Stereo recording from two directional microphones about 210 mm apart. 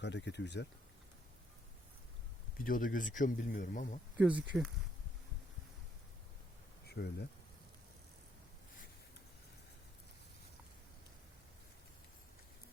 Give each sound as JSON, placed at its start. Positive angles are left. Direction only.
{"t": 0.0, "sound": "speech", "side_deg": 55}
{"t": 2.6, "sound": "speech", "side_deg": 40}
{"t": 4.2, "sound": "speech", "side_deg": -5}
{"t": 6.8, "sound": "speech", "side_deg": 50}